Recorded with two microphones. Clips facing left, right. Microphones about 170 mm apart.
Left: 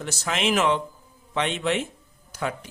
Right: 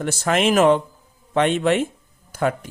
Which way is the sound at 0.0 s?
50° right (ahead or behind).